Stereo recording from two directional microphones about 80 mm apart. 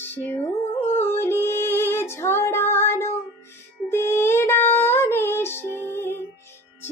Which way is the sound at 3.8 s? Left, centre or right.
Left.